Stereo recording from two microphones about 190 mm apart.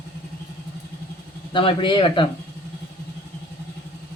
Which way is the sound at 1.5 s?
25° left (ahead or behind).